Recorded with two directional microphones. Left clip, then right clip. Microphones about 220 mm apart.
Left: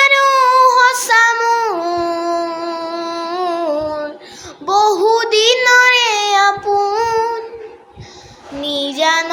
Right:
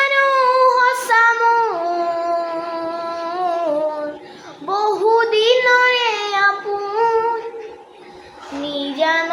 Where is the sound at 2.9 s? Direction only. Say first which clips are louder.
Left 2 dB; 50° left (ahead or behind).